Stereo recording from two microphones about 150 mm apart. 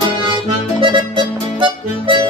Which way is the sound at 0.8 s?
30° right (ahead or behind).